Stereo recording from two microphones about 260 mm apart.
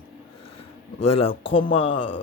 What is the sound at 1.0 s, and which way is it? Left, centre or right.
Speech, left.